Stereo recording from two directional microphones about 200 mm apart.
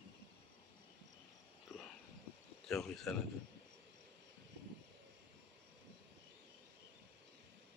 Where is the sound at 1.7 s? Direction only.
5° right (ahead or behind).